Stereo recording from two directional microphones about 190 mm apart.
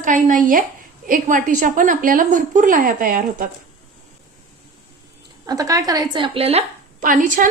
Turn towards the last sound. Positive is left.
turn(degrees=-45)  # may be behind; listen again after turning